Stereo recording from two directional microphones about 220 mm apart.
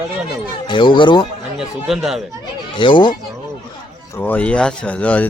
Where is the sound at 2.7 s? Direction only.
20° left (ahead or behind).